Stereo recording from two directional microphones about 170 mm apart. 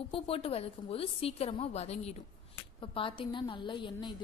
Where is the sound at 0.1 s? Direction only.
35° left (ahead or behind).